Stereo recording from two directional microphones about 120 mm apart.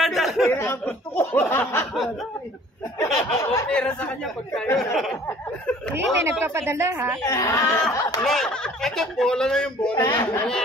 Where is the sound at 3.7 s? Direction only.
10° left (ahead or behind).